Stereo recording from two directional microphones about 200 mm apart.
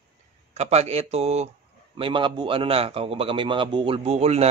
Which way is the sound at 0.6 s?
30° right (ahead or behind).